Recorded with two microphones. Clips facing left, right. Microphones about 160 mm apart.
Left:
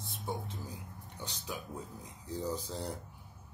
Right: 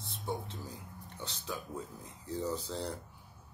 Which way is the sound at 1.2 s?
15° left (ahead or behind).